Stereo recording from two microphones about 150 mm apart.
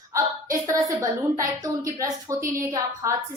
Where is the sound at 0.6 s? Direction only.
20° right (ahead or behind).